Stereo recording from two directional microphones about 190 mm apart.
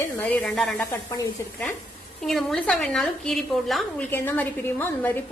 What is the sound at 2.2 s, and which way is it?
A woman's voice, centre (ahead or behind).